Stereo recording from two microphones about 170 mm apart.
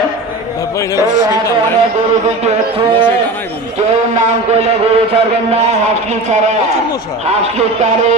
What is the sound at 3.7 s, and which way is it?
A man's voice, 40° right (ahead or behind).